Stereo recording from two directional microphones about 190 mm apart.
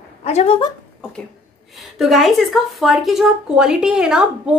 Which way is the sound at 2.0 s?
Centre (ahead or behind).